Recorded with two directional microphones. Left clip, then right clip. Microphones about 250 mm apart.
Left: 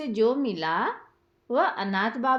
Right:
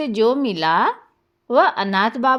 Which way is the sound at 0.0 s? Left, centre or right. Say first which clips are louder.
Right 6 dB; right.